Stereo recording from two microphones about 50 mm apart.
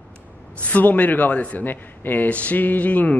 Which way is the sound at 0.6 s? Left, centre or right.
Left.